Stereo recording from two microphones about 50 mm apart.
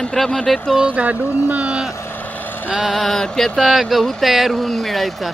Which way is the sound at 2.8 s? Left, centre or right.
Centre.